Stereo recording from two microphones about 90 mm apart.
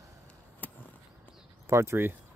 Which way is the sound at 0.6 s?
20° left (ahead or behind).